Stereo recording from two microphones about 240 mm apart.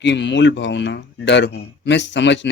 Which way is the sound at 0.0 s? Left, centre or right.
Left.